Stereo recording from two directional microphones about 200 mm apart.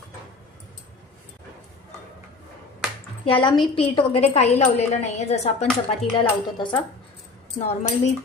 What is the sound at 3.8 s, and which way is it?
Speech, 30° left (ahead or behind).